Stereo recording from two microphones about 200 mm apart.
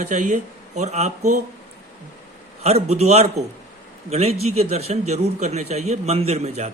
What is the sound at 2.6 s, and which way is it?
A man's voice, 30° right (ahead or behind).